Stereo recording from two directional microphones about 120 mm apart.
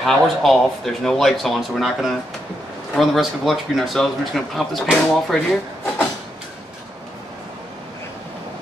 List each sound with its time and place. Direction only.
0.0 s speech: centre (ahead or behind)